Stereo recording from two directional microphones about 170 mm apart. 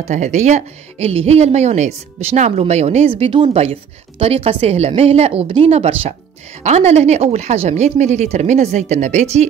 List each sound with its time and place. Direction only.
0.1 s speech: 45° right (ahead or behind)